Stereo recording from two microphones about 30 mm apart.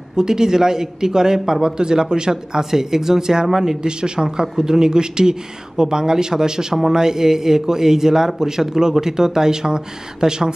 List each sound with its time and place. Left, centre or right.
0.1 s speech: right
2.7 s speech: centre
3.8 s speech: right